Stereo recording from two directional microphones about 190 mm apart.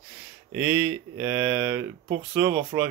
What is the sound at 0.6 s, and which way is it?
Speech, 10° right (ahead or behind).